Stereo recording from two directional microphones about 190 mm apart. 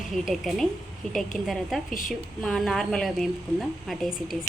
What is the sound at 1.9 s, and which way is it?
Speech, 45° left (ahead or behind).